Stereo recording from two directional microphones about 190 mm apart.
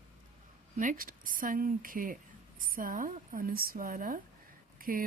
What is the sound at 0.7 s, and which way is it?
A woman's voice, 45° right (ahead or behind).